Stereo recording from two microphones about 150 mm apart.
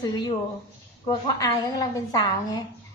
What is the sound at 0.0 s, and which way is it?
A woman's voice, 25° left (ahead or behind).